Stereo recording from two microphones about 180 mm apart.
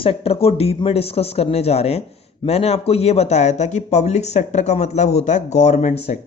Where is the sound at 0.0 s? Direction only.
30° left (ahead or behind).